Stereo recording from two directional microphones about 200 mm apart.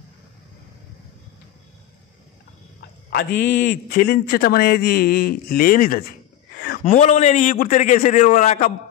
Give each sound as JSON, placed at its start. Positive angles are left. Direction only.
{"t": 3.1, "sound": "a man's voice", "side_deg": 55}
{"t": 6.8, "sound": "a man's voice", "side_deg": 35}